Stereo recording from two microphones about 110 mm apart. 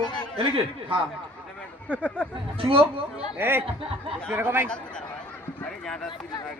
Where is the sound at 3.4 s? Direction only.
20° right (ahead or behind).